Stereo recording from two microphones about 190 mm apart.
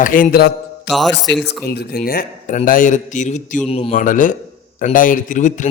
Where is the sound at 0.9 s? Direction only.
65° left (ahead or behind).